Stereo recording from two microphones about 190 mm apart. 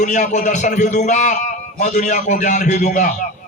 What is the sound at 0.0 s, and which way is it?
A man's voice, 40° left (ahead or behind).